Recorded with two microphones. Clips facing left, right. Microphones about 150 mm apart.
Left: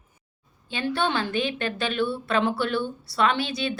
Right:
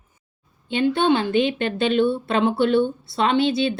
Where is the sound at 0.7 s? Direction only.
20° right (ahead or behind).